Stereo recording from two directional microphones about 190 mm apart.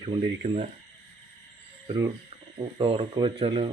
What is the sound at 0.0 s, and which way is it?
Speech, 30° right (ahead or behind).